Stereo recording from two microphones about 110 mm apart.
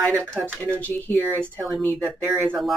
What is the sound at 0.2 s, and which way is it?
Speech, 10° left (ahead or behind).